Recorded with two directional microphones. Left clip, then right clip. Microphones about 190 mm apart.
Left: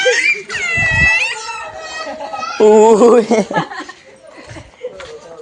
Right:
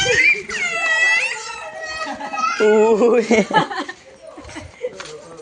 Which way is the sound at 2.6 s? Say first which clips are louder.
Left 7 dB; 35° left (ahead or behind).